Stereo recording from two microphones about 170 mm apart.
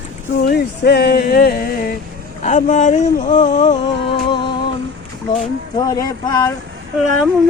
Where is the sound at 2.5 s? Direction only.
45° left (ahead or behind).